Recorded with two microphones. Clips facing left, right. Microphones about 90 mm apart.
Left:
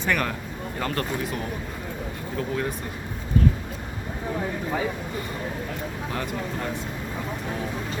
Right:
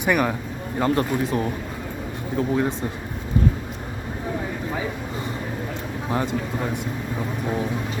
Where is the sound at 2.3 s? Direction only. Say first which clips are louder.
Right 6 dB; 25° right (ahead or behind).